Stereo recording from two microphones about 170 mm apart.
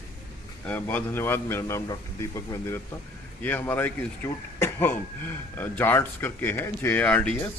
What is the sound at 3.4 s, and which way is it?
Speech, 10° left (ahead or behind).